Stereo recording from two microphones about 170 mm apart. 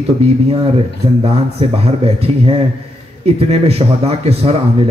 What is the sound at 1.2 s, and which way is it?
Speech, 35° right (ahead or behind).